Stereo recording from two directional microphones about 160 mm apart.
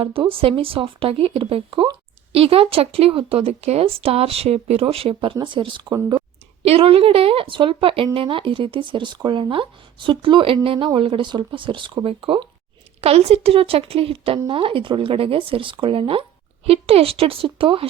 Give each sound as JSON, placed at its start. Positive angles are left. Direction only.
{"t": 0.0, "sound": "speech", "side_deg": -35}